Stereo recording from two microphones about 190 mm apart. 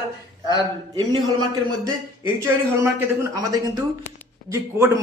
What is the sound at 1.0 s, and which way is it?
Speech, 20° right (ahead or behind).